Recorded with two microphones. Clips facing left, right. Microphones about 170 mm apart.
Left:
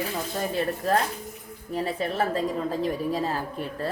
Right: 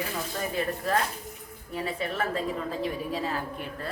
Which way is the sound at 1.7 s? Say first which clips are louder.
Left 4 dB; 35° left (ahead or behind).